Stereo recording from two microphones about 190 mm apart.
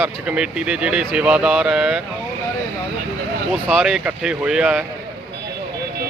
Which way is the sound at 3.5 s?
Centre (ahead or behind).